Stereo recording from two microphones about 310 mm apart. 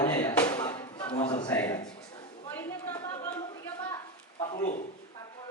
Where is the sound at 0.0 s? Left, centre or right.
Centre.